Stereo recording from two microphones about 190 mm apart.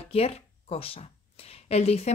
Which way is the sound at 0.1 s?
30° left (ahead or behind).